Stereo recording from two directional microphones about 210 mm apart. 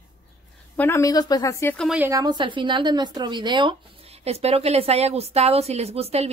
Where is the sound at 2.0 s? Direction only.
15° right (ahead or behind).